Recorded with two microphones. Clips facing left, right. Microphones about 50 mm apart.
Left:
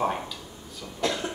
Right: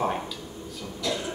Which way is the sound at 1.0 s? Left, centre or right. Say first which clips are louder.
Left 2 dB; left.